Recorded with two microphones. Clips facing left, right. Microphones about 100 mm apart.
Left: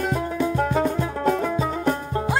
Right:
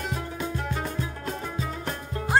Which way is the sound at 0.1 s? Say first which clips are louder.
Left 8 dB; 50° left (ahead or behind).